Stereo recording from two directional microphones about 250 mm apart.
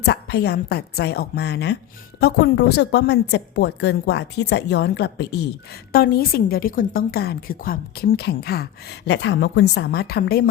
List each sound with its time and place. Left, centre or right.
0.0 s a woman's voice: left